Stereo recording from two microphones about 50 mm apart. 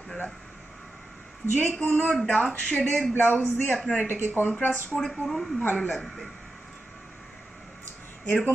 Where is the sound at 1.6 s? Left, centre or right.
Centre.